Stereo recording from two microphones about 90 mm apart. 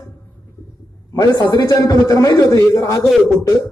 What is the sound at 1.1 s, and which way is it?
A man's voice, 45° left (ahead or behind).